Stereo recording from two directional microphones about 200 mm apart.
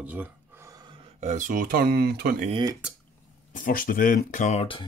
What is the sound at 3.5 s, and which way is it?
Speech, 45° left (ahead or behind).